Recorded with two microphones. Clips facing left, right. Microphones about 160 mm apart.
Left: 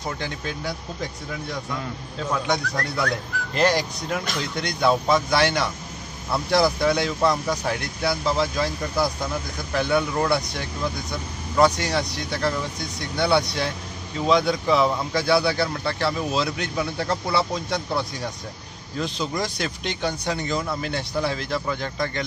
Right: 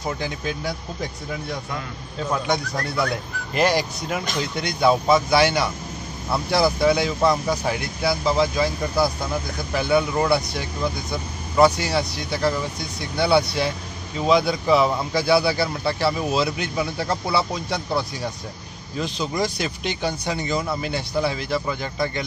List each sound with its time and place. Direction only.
2.3 s speech: 5° right (ahead or behind)